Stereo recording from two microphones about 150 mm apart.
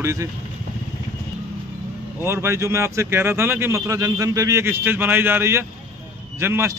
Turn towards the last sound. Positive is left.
turn(degrees=-15)  # may be behind; listen again after turning